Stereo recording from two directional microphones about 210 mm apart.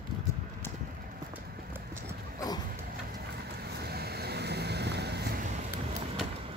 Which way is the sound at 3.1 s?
50° right (ahead or behind).